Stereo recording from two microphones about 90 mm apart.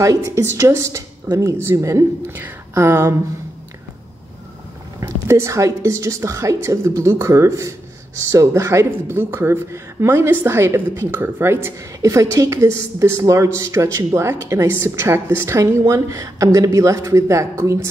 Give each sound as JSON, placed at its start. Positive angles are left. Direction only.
{"t": 0.0, "sound": "speech", "side_deg": -35}
{"t": 5.0, "sound": "speech", "side_deg": -35}